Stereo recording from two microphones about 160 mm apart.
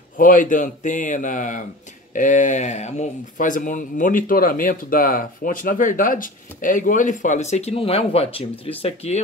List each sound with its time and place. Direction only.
0.2 s a man's voice: 55° left (ahead or behind); by 9.2 s 40° left (ahead or behind)